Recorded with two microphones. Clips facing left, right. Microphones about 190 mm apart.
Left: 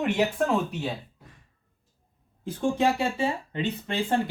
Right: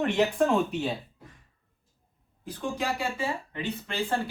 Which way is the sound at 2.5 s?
25° left (ahead or behind).